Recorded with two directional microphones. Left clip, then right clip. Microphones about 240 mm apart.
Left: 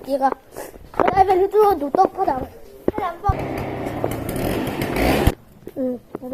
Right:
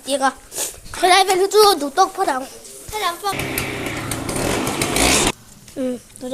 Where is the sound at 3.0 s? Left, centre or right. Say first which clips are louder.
Right 5 dB; right.